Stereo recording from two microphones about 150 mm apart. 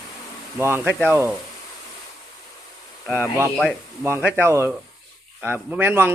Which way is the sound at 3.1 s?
15° right (ahead or behind).